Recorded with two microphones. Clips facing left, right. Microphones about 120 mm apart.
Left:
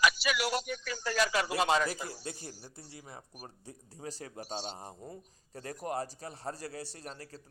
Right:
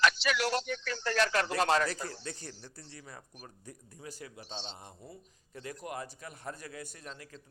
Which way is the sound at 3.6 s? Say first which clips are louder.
Left 4 dB; 35° left (ahead or behind).